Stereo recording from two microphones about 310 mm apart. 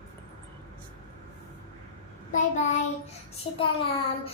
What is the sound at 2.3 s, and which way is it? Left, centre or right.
Child singing, left.